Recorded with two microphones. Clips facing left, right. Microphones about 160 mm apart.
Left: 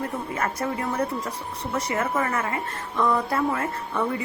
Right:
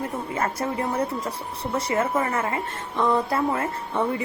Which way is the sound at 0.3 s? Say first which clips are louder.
Right 2 dB; 30° right (ahead or behind).